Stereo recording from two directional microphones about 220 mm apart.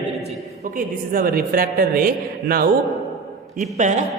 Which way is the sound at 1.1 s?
40° right (ahead or behind).